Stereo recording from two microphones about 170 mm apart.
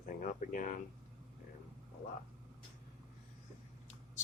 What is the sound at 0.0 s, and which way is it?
Speech, 50° left (ahead or behind).